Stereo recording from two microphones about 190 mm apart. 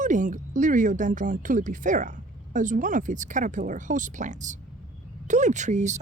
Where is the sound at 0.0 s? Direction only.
40° right (ahead or behind).